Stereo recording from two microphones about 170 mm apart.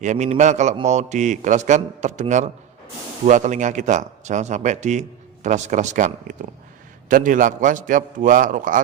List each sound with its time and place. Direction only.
0.0 s speech: 45° right (ahead or behind)